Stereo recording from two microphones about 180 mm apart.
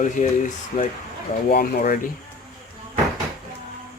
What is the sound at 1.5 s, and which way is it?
Speech, 50° left (ahead or behind).